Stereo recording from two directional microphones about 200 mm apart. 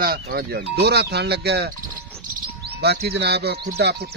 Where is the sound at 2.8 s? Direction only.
55° right (ahead or behind).